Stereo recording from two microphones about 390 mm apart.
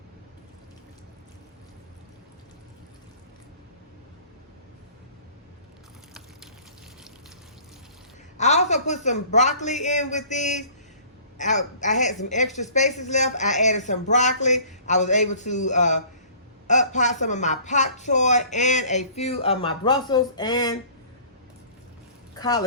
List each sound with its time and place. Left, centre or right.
8.4 s speech: centre
22.4 s speech: centre